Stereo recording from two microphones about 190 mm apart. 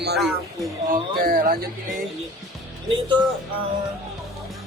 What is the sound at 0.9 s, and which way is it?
Speech, 50° right (ahead or behind).